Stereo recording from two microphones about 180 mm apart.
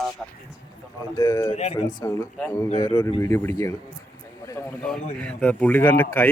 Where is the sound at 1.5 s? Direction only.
35° left (ahead or behind).